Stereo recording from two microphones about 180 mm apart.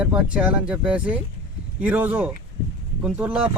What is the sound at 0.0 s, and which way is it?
Speech, 5° right (ahead or behind).